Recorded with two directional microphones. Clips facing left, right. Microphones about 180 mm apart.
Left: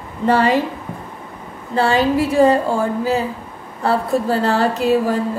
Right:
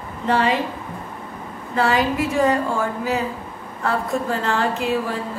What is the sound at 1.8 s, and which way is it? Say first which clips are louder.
A woman's voice: left 4 dB; 30° left (ahead or behind).